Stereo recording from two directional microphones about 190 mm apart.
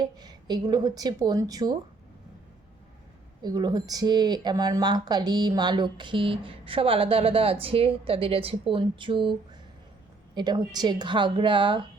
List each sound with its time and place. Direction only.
0.0 s speech: 20° right (ahead or behind)
3.4 s speech: 20° right (ahead or behind)
10.3 s speech: 20° right (ahead or behind)